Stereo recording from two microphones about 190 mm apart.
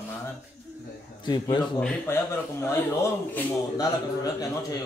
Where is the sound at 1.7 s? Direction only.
10° left (ahead or behind).